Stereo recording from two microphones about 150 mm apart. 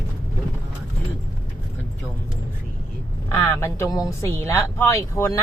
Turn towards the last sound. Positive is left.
turn(degrees=20)  # may be behind; listen again after turning